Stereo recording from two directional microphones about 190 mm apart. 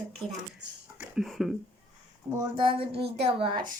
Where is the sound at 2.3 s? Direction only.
20° right (ahead or behind).